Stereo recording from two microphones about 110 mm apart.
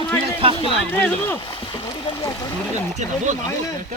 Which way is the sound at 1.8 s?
35° left (ahead or behind).